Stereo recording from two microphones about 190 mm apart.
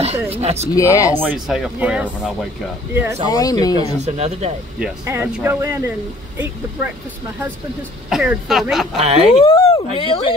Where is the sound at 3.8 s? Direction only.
35° right (ahead or behind).